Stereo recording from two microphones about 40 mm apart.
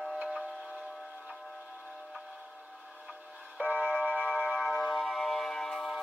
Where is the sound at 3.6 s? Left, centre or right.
Right.